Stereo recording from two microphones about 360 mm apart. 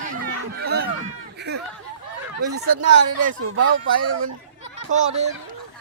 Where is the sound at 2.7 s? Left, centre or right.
Right.